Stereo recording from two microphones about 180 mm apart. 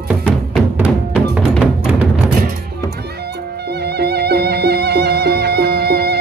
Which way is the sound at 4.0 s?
65° right (ahead or behind).